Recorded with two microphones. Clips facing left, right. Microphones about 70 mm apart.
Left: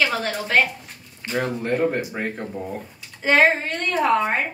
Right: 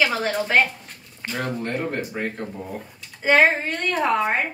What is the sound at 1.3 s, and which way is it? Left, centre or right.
Speech, centre.